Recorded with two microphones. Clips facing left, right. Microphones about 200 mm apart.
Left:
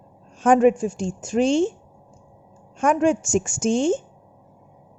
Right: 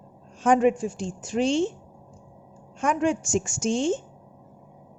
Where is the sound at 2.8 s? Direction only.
50° left (ahead or behind).